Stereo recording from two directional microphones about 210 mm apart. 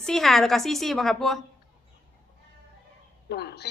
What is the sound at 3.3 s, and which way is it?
Speech, 50° left (ahead or behind).